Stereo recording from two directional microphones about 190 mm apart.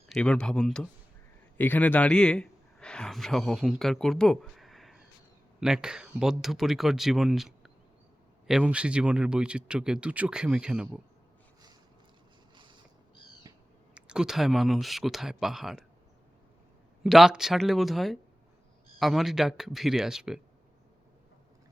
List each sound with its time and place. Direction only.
0.1 s a man's voice: 5° left (ahead or behind)
13.5 s owl: 20° right (ahead or behind)
13.9 s speech: 5° right (ahead or behind)
17.0 s speech: centre (ahead or behind)